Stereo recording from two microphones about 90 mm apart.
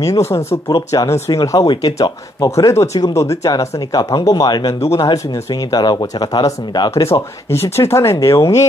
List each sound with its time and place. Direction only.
0.0 s speech: 35° left (ahead or behind)
0.7 s speech: 45° left (ahead or behind)
1.0 s speech: 30° left (ahead or behind)
1.3 s speech: 45° left (ahead or behind)
1.7 s speech: 55° left (ahead or behind)
2.4 s speech: 40° left (ahead or behind)
6.9 s speech: 30° left (ahead or behind)